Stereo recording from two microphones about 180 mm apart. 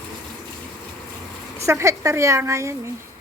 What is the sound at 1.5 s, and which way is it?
A woman's voice, 15° right (ahead or behind).